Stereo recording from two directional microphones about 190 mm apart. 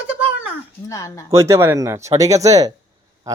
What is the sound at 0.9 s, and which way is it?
Speech, 15° left (ahead or behind).